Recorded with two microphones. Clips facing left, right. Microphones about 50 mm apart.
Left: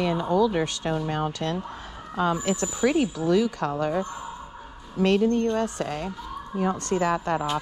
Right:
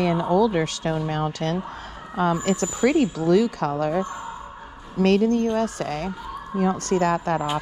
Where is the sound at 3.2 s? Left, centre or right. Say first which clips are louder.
Right 3 dB; right.